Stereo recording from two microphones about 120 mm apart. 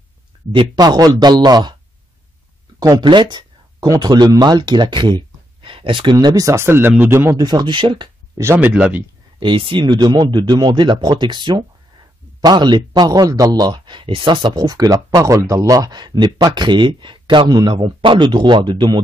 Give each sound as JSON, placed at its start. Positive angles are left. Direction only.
{"t": 0.5, "sound": "speech", "side_deg": -40}
{"t": 2.8, "sound": "speech", "side_deg": -30}
{"t": 6.1, "sound": "speech", "side_deg": -30}
{"t": 7.3, "sound": "speech", "side_deg": -35}
{"t": 8.4, "sound": "speech", "side_deg": -20}
{"t": 9.4, "sound": "speech", "side_deg": -45}